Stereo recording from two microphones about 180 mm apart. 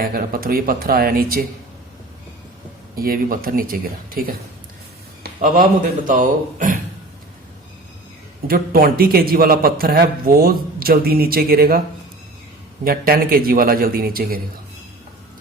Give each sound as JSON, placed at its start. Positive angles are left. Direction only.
{"t": 0.0, "sound": "a man's voice", "side_deg": -55}
{"t": 2.9, "sound": "speech", "side_deg": -55}
{"t": 5.2, "sound": "a sound", "side_deg": -50}
{"t": 6.1, "sound": "speech", "side_deg": -45}
{"t": 8.4, "sound": "a man's voice", "side_deg": -55}
{"t": 12.8, "sound": "a man's voice", "side_deg": -55}